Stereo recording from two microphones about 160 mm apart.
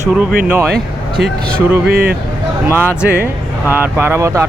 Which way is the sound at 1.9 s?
80° right.